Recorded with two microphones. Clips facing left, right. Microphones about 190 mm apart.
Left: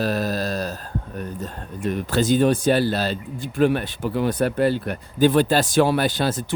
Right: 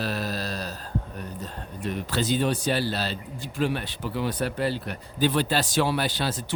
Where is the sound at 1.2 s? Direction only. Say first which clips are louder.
Left 5 dB; 50° left (ahead or behind).